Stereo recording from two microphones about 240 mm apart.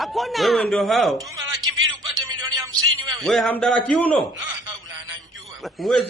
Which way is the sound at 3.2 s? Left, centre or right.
Centre.